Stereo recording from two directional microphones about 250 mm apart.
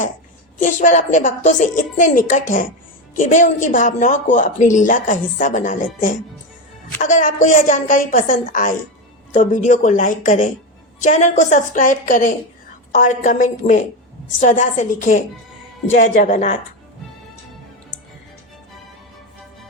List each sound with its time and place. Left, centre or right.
0.6 s speech: left